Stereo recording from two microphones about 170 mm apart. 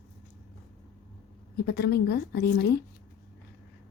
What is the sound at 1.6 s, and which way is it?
A woman's voice, 70° left (ahead or behind).